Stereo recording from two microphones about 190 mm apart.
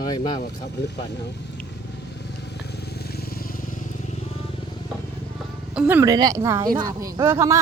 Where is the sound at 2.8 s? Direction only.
55° left (ahead or behind).